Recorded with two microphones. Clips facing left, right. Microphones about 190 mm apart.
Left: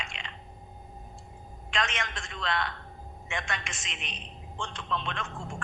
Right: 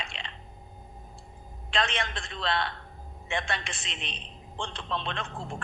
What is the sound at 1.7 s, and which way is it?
A man's voice, 30° right (ahead or behind).